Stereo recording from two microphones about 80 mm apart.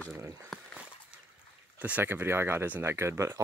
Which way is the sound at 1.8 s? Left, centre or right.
Right.